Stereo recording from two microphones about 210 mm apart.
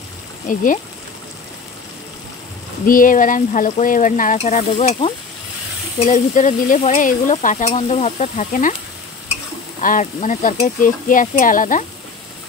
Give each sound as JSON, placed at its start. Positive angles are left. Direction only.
{"t": 0.5, "sound": "stir", "side_deg": 40}
{"t": 2.9, "sound": "stir", "side_deg": 40}
{"t": 9.8, "sound": "stir", "side_deg": 40}